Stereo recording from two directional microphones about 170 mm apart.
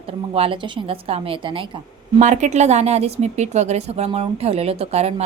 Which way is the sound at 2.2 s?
45° right (ahead or behind).